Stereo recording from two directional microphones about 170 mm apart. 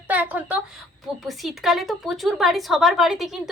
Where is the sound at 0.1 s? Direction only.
10° right (ahead or behind).